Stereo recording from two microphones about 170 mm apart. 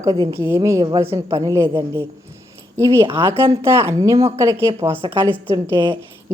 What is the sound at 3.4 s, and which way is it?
A woman's voice, 15° right (ahead or behind).